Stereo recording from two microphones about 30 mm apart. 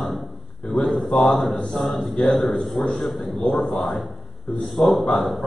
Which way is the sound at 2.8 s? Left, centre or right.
Left.